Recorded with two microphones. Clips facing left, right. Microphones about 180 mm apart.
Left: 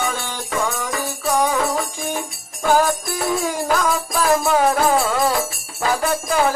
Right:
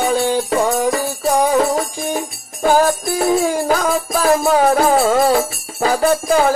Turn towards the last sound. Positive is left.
turn(degrees=-40)  # may be behind; listen again after turning